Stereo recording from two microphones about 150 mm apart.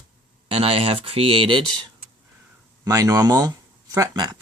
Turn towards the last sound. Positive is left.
turn(degrees=-25)  # may be behind; listen again after turning